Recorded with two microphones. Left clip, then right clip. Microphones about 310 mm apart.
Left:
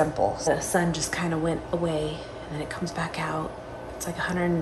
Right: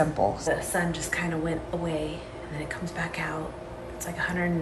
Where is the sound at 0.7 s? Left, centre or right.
Centre.